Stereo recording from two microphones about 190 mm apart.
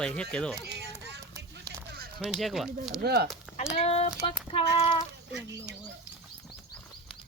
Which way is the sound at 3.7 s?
35° left (ahead or behind).